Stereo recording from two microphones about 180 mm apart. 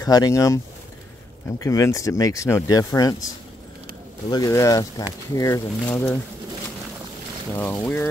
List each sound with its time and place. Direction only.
0.0 s speech: 20° left (ahead or behind)
1.6 s speech: 15° left (ahead or behind)
4.3 s speech: 20° left (ahead or behind)
7.5 s speech: 10° left (ahead or behind)